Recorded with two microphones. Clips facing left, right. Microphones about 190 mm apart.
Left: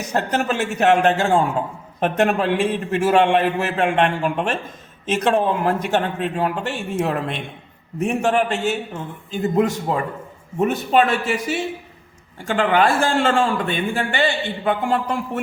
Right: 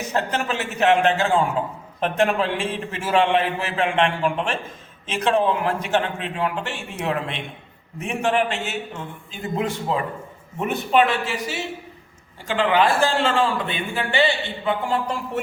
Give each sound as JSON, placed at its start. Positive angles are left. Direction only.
{"t": 0.1, "sound": "a man's voice", "side_deg": 40}